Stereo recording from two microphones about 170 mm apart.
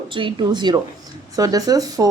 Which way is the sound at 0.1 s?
30° right (ahead or behind).